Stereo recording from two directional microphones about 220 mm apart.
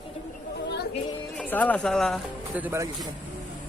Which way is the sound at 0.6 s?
50° left (ahead or behind).